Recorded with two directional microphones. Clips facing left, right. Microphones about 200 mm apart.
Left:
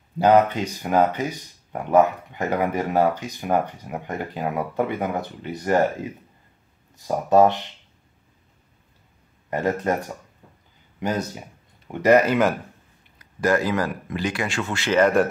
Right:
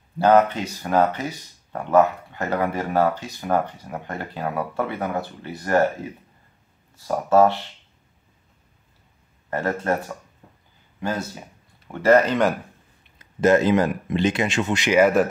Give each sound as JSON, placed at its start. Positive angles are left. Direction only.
{"t": 0.2, "sound": "speech", "side_deg": 15}
{"t": 7.0, "sound": "speech", "side_deg": 15}
{"t": 9.5, "sound": "speech", "side_deg": 15}
{"t": 11.0, "sound": "speech", "side_deg": 15}
{"t": 13.2, "sound": "speech", "side_deg": -25}